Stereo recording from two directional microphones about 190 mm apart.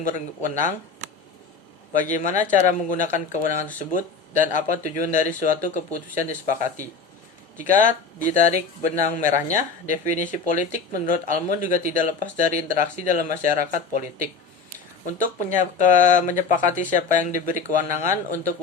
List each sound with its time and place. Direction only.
0.0 s speech: 40° left (ahead or behind)
1.9 s a woman's voice: 40° left (ahead or behind)
7.5 s a woman's voice: 40° left (ahead or behind)
15.0 s a woman's voice: 40° left (ahead or behind)